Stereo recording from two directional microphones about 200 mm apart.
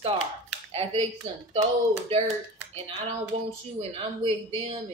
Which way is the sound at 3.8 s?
30° right (ahead or behind).